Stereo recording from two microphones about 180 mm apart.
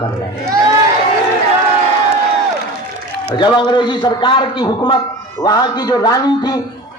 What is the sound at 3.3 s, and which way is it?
A man's voice, 25° left (ahead or behind).